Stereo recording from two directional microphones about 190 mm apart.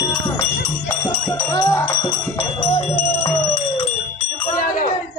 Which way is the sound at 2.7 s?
30° left (ahead or behind).